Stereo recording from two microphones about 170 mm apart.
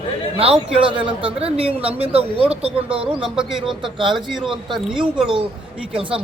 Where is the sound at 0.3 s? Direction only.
35° right (ahead or behind).